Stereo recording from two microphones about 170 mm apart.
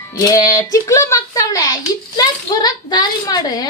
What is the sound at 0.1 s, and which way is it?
Speech, 20° left (ahead or behind).